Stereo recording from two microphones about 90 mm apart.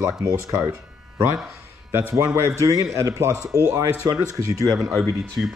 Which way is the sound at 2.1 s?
35° right (ahead or behind).